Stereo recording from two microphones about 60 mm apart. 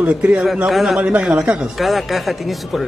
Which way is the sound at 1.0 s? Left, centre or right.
Right.